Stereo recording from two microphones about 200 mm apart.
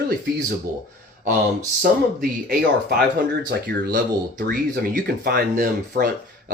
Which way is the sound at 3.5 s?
50° right (ahead or behind).